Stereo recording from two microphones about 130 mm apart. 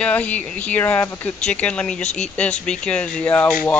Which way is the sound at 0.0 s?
10° left (ahead or behind).